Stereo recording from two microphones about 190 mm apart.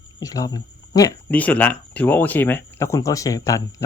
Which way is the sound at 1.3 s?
10° left (ahead or behind).